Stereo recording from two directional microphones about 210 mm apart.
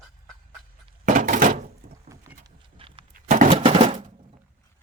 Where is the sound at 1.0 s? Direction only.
35° right (ahead or behind).